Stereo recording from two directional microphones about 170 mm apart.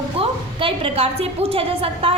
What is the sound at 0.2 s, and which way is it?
A woman's voice, 35° right (ahead or behind).